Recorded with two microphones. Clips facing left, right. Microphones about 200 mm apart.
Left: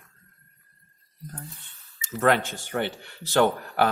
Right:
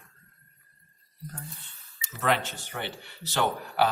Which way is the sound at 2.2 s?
50° left (ahead or behind).